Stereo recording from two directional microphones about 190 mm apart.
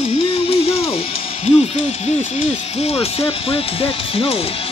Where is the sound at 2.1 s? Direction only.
35° left (ahead or behind).